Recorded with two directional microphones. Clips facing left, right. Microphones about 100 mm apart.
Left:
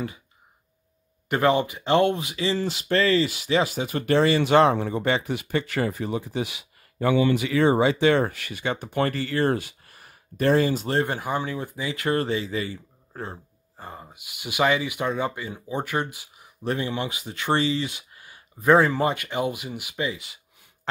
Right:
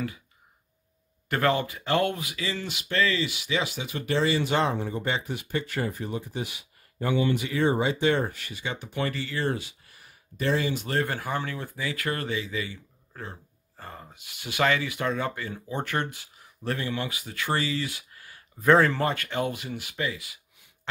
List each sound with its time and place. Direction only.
1.3 s speech: 20° left (ahead or behind); by 13.4 s 35° left (ahead or behind)
13.7 s speech: 15° left (ahead or behind)